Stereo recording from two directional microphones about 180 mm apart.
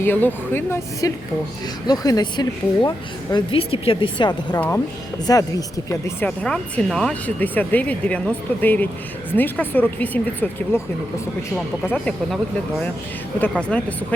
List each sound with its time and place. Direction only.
0.0 s a woman's voice: 10° left (ahead or behind)
13.6 s a woman's voice: 5° left (ahead or behind)